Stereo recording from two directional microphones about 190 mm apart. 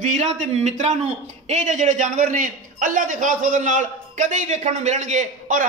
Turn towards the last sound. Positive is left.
turn(degrees=-40)  # may be behind; listen again after turning